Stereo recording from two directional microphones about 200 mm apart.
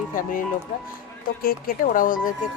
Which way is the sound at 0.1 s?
45° left (ahead or behind).